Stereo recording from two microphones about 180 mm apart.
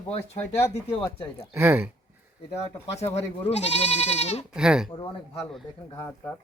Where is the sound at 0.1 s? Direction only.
35° left (ahead or behind).